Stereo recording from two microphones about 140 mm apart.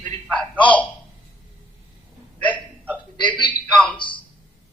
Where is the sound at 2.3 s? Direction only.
10° left (ahead or behind).